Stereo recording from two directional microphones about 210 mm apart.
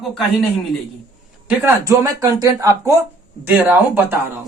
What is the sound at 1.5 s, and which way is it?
Speech, 10° right (ahead or behind).